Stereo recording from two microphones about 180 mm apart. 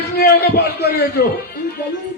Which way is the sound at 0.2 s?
65° left (ahead or behind).